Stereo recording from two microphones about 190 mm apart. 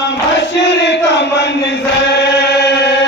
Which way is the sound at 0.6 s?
70° left (ahead or behind).